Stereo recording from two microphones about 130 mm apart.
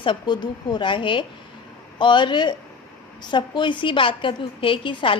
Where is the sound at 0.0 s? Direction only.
35° left (ahead or behind).